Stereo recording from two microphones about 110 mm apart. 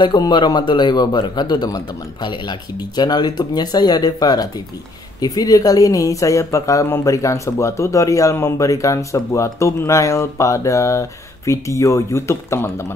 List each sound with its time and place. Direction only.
0.0 s a man's voice: 45° left (ahead or behind)
3.0 s speech: 40° left (ahead or behind)